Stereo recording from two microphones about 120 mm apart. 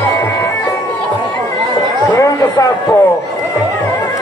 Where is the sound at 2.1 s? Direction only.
25° left (ahead or behind).